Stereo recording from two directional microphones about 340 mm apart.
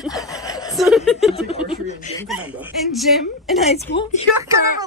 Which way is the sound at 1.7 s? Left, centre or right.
Centre.